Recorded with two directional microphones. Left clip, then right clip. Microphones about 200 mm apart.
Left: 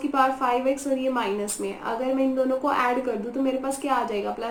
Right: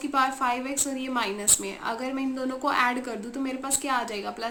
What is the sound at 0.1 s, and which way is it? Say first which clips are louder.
A woman's voice: left 2 dB; 55° right (ahead or behind).